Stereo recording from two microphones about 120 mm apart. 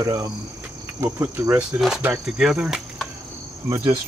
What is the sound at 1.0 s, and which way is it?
Cricket, 20° right (ahead or behind).